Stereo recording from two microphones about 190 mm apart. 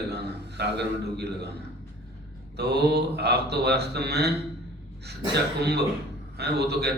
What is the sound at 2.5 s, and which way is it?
A man's voice, 60° right (ahead or behind).